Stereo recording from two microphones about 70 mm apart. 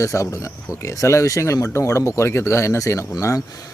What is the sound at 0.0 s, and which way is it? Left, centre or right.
Speech, left.